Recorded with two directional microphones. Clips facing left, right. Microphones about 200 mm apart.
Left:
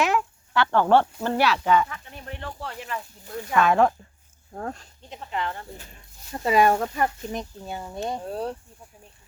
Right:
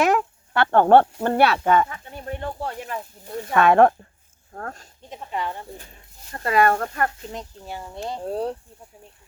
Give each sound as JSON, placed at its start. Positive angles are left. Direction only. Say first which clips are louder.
{"t": 0.0, "sound": "speech", "louder": "right 4 dB", "side_deg": -50}
{"t": 3.5, "sound": "speech", "louder": "right 4 dB", "side_deg": -60}
{"t": 5.3, "sound": "speech", "louder": "right 1 dB", "side_deg": -10}
{"t": 6.3, "sound": "speech", "louder": "even", "side_deg": 5}
{"t": 8.3, "sound": "speech", "louder": "right 4 dB", "side_deg": -25}